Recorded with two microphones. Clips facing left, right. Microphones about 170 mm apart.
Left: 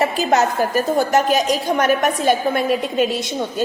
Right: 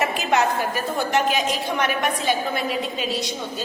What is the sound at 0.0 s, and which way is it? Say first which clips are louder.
A woman's voice: left 4 dB; 35° left (ahead or behind).